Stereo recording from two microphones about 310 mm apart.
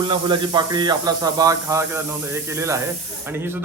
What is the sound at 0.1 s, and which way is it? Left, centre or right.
A man's voice, centre.